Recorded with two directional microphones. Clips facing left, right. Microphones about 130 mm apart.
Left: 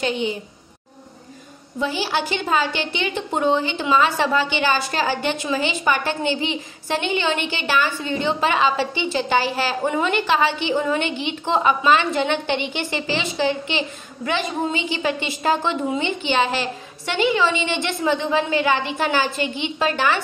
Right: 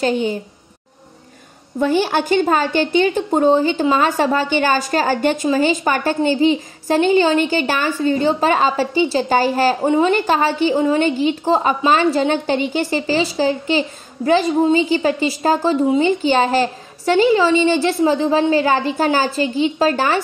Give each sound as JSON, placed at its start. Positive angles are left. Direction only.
{"t": 0.0, "sound": "a woman's voice", "side_deg": -45}
{"t": 1.8, "sound": "a woman's voice", "side_deg": -50}